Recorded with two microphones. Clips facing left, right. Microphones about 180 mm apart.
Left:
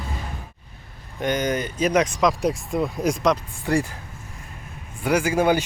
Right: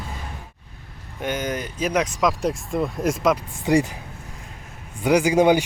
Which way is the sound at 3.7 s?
15° right (ahead or behind).